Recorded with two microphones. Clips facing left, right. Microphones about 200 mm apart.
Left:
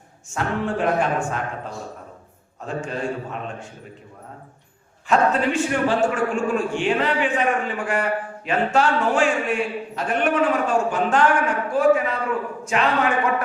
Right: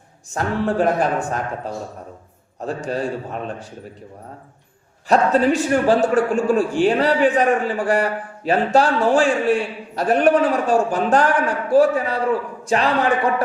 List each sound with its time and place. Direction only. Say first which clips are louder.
0.3 s a man's voice: right 3 dB; 40° right (ahead or behind)
5.0 s a man's voice: right 4 dB; 35° right (ahead or behind)